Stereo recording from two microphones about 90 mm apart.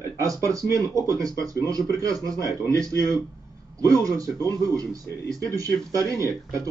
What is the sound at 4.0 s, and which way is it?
Speech, 40° right (ahead or behind).